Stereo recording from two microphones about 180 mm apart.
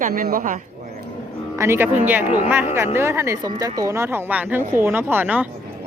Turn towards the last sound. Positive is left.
turn(degrees=-10)  # may be behind; listen again after turning